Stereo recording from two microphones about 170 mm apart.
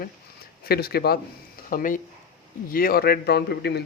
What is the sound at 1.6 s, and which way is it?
Speech, 55° left (ahead or behind).